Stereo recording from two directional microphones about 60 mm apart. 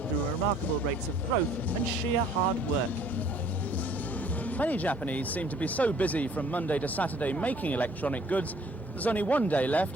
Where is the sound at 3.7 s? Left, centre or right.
Left.